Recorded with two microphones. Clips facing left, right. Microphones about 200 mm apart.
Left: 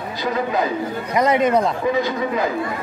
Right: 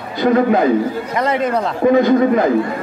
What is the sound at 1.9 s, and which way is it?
Speech, 55° right (ahead or behind).